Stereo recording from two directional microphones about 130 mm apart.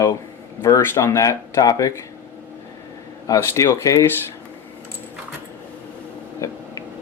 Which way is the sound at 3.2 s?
25° left (ahead or behind).